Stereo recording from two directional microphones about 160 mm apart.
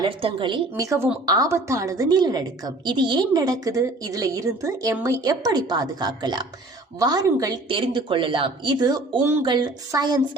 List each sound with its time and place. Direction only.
0.0 s a woman's voice: 35° right (ahead or behind)